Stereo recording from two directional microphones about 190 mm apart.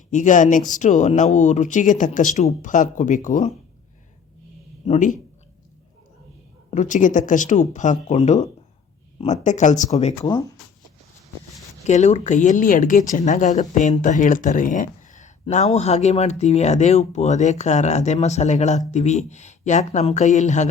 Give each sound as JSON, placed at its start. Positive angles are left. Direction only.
{"t": 0.1, "sound": "speech", "side_deg": 40}
{"t": 4.9, "sound": "speech", "side_deg": 40}
{"t": 6.7, "sound": "speech", "side_deg": 40}
{"t": 11.9, "sound": "speech", "side_deg": 40}